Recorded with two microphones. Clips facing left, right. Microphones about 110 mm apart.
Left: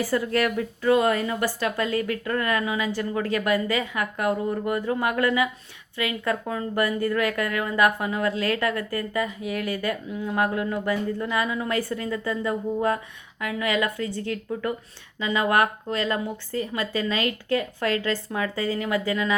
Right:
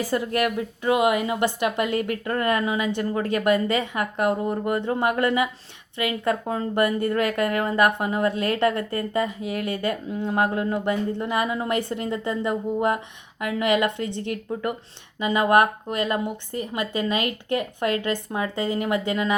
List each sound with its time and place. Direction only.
0.0 s a woman's voice: 20° right (ahead or behind)